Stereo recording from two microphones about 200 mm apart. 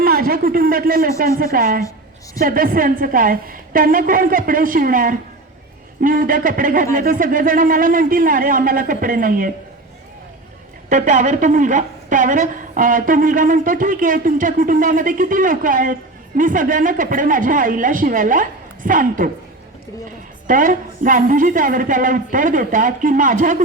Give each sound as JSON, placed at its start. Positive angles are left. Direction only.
{"t": 0.0, "sound": "a man's voice", "side_deg": -45}
{"t": 10.8, "sound": "a woman's voice", "side_deg": -40}
{"t": 20.5, "sound": "a woman's voice", "side_deg": -40}